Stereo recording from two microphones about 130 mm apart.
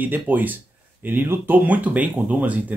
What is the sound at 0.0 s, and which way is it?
Speech, 15° right (ahead or behind).